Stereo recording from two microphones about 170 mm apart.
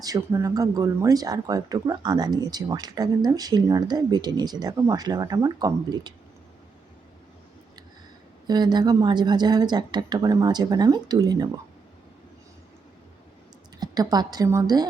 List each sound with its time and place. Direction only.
0.0 s speech: 20° right (ahead or behind)
8.4 s speech: 25° right (ahead or behind)
13.7 s a woman's voice: 25° right (ahead or behind)